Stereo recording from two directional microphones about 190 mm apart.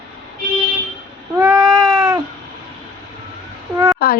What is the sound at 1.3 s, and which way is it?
Baby cry, 10° right (ahead or behind).